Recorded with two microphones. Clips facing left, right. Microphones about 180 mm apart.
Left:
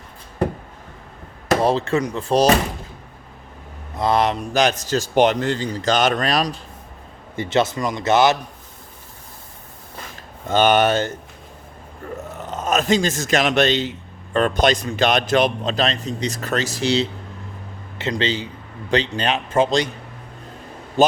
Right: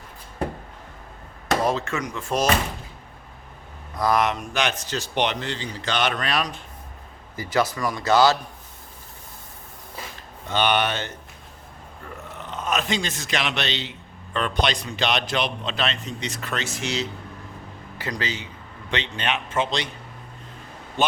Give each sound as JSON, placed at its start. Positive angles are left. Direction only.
{"t": 1.6, "sound": "a man's voice", "side_deg": 30}
{"t": 3.9, "sound": "a man's voice", "side_deg": 25}
{"t": 7.3, "sound": "speech", "side_deg": 25}
{"t": 10.5, "sound": "speech", "side_deg": 45}
{"t": 12.4, "sound": "a man's voice", "side_deg": 45}